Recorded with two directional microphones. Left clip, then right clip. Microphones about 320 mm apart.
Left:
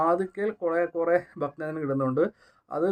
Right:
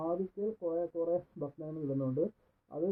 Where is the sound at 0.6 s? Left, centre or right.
Left.